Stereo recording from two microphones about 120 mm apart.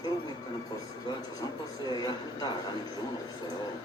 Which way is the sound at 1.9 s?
35° left (ahead or behind).